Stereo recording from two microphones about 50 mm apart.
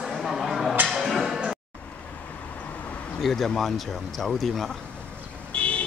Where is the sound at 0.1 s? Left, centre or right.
Centre.